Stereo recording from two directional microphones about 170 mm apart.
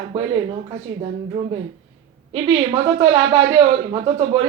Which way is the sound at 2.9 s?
35° right (ahead or behind).